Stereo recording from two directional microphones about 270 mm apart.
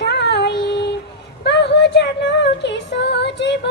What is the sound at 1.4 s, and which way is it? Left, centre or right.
Child singing, left.